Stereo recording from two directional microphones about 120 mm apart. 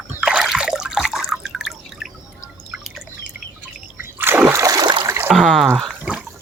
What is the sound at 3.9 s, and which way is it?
Splash, 15° right (ahead or behind).